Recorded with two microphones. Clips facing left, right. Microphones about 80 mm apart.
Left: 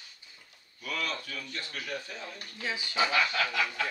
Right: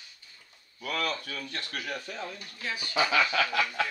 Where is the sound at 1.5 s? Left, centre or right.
Right.